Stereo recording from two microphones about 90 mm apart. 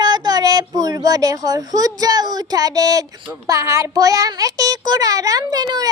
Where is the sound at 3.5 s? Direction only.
35° right (ahead or behind).